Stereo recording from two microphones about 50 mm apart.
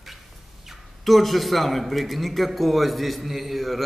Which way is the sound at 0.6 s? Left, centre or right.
Centre.